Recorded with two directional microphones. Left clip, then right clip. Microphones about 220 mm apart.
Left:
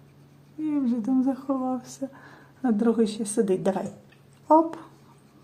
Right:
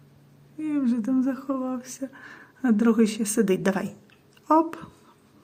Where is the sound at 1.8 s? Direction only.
Centre (ahead or behind).